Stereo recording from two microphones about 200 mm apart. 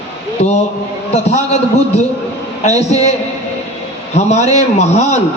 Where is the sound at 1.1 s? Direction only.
35° left (ahead or behind).